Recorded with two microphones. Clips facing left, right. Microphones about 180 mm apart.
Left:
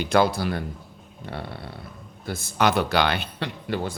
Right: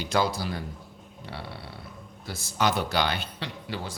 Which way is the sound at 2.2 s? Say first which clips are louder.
Left 4 dB; 55° left (ahead or behind).